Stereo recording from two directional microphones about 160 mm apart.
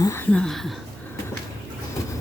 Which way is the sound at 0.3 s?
5° left (ahead or behind).